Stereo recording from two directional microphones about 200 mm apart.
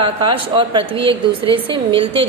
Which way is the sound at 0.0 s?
25° right (ahead or behind).